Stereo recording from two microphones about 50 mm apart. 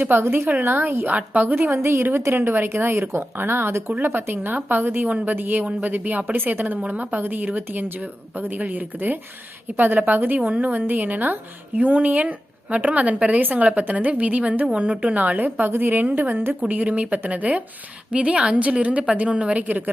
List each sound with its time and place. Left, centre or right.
0.0 s speech: right
1.1 s speech: right
1.7 s a woman's voice: right
3.9 s a woman's voice: right